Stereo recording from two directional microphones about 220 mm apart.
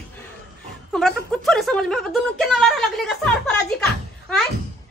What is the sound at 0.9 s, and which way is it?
A woman's voice, centre (ahead or behind).